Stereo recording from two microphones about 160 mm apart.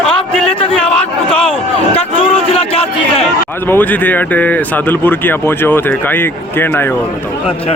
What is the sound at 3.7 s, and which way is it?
Speech, 10° left (ahead or behind).